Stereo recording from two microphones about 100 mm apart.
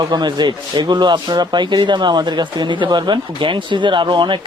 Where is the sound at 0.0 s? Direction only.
45° right (ahead or behind).